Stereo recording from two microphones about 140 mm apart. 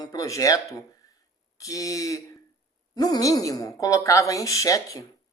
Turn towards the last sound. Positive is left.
turn(degrees=25)  # may be behind; listen again after turning